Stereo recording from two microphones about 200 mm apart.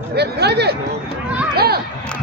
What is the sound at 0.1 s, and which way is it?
Speech, 55° right (ahead or behind).